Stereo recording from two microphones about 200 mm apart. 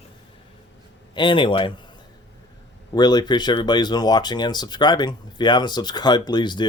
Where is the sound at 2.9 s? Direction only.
20° left (ahead or behind).